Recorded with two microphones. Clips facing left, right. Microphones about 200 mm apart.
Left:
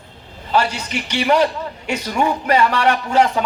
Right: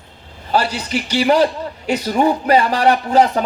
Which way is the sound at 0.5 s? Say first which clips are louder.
Right 1 dB; 35° right (ahead or behind).